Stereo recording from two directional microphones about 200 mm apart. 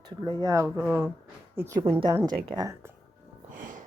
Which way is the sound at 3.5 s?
40° right (ahead or behind).